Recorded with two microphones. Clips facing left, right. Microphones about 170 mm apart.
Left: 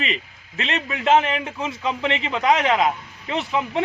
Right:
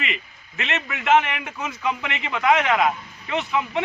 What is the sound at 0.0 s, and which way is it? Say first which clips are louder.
A man's voice: left 3 dB; 30° left (ahead or behind).